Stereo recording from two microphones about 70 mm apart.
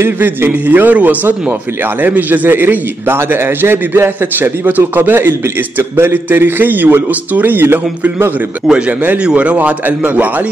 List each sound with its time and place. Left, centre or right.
0.0 s a man's voice: right
8.6 s a man's voice: centre